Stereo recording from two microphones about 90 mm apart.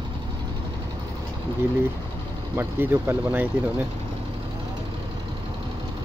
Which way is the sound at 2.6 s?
25° right (ahead or behind).